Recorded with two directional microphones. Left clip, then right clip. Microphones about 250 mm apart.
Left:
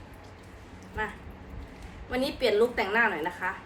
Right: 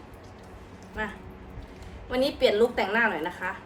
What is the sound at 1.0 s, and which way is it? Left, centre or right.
A woman's voice, centre.